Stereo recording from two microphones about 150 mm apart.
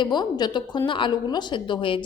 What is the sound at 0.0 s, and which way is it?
A woman's voice, 30° left (ahead or behind).